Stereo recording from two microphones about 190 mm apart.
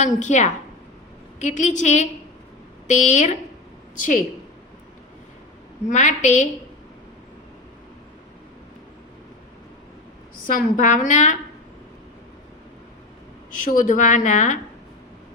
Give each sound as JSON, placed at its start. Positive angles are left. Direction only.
{"t": 0.0, "sound": "a woman's voice", "side_deg": 40}
{"t": 5.9, "sound": "a woman's voice", "side_deg": 40}
{"t": 10.4, "sound": "a woman's voice", "side_deg": 45}
{"t": 13.5, "sound": "a woman's voice", "side_deg": 45}